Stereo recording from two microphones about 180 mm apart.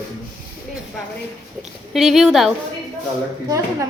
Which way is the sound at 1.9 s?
Centre (ahead or behind).